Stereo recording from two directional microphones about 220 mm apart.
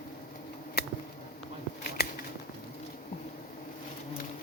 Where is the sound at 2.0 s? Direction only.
45° left (ahead or behind).